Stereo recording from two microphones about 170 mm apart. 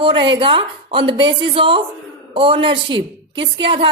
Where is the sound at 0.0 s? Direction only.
30° right (ahead or behind).